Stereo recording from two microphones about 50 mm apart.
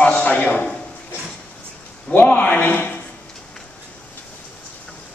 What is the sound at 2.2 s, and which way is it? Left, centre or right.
Speech, left.